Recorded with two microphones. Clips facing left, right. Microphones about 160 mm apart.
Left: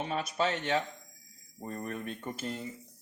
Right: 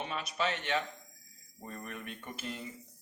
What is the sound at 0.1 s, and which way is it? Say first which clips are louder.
Speech: left 5 dB; 40° left (ahead or behind).